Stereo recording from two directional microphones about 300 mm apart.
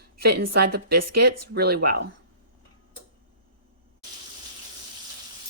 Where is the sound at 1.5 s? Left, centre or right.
Right.